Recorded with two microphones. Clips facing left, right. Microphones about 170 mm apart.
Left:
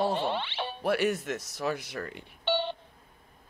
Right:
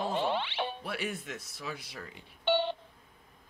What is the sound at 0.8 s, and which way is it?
A man's voice, 75° left (ahead or behind).